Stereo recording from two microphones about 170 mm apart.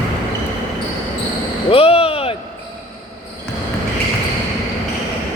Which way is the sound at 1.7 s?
35° left (ahead or behind).